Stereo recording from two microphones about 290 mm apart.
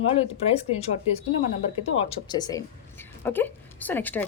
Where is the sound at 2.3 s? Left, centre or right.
Centre.